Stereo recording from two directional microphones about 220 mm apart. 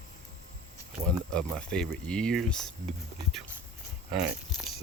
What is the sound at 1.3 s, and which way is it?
Speech, 5° left (ahead or behind).